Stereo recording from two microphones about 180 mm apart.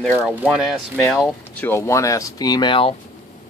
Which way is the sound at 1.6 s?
15° left (ahead or behind).